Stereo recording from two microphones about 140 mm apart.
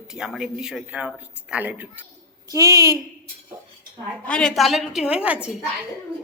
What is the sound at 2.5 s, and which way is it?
Speech, 25° right (ahead or behind).